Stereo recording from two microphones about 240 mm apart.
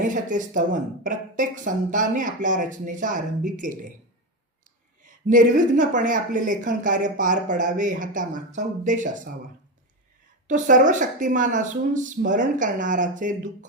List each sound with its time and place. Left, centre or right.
0.0 s a woman's voice: right
5.0 s a woman's voice: right
10.4 s a woman's voice: right